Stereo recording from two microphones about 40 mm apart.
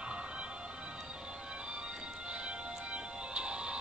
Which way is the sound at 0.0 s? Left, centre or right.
Right.